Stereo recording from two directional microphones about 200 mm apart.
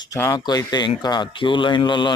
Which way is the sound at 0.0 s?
15° left (ahead or behind).